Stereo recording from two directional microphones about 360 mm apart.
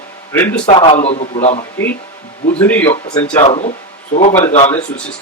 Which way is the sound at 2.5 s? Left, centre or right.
Centre.